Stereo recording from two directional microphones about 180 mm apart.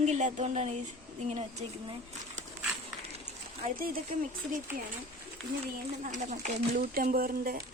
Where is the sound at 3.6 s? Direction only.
55° right (ahead or behind).